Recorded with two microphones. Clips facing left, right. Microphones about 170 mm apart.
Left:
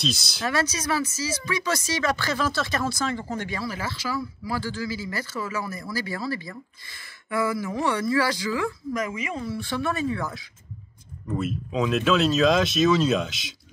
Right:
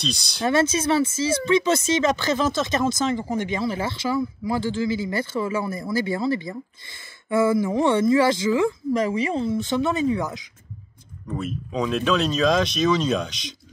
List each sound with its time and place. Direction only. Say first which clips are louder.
0.0 s speech: even; centre (ahead or behind)
0.4 s speech: right 7 dB; 25° right (ahead or behind)
11.2 s speech: left 1 dB; 5° left (ahead or behind)